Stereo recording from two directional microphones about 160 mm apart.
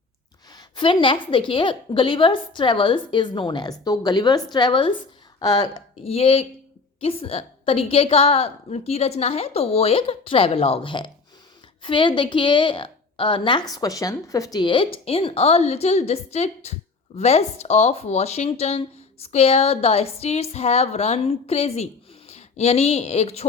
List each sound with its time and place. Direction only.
0.5 s a woman's voice: 30° left (ahead or behind)
6.1 s a woman's voice: 35° left (ahead or behind)